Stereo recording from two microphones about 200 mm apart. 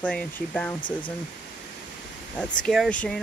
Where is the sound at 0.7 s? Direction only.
25° left (ahead or behind).